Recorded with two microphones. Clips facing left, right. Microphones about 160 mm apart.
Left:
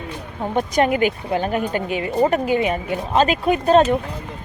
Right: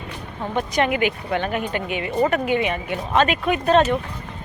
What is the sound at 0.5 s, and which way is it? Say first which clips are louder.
Speech: left 3 dB; 40° left (ahead or behind).